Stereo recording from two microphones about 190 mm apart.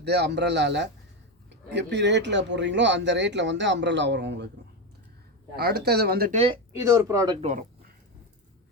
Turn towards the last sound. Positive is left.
turn(degrees=-40)  # may be behind; listen again after turning